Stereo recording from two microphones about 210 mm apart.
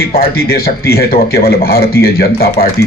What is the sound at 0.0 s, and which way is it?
A man's voice, 45° left (ahead or behind).